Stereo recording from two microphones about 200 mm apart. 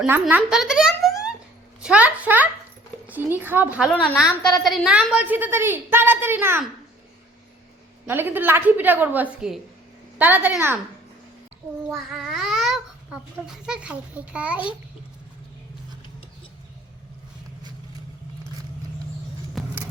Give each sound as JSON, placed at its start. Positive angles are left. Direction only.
{"t": 0.0, "sound": "a child's voice", "side_deg": -10}
{"t": 8.0, "sound": "a woman's voice", "side_deg": -10}
{"t": 11.9, "sound": "babbling", "side_deg": 0}
{"t": 13.6, "sound": "a woman's voice", "side_deg": -5}
{"t": 19.6, "sound": "vehicle", "side_deg": 0}